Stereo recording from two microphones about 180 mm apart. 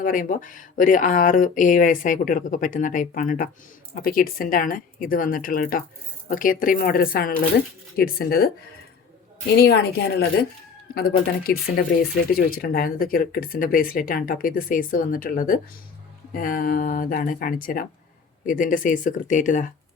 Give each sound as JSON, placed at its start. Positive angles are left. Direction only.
{"t": 0.0, "sound": "a woman's voice", "side_deg": 45}
{"t": 9.6, "sound": "a woman's voice", "side_deg": 60}